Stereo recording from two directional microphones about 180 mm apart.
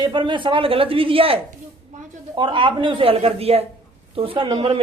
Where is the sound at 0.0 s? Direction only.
25° right (ahead or behind).